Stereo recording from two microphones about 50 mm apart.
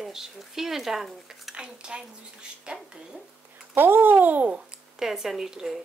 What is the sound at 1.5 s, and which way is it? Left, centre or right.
A woman's voice, centre.